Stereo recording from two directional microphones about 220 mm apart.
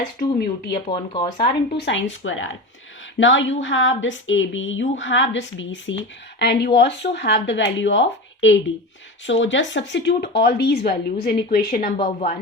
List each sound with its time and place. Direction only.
0.2 s speech: 45° left (ahead or behind)
0.9 s speech: 20° left (ahead or behind)
1.7 s a woman's voice: 50° left (ahead or behind); by 12.4 s 35° left (ahead or behind)